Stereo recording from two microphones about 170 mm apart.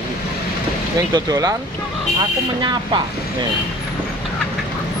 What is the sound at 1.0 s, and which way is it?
Speech, 20° right (ahead or behind).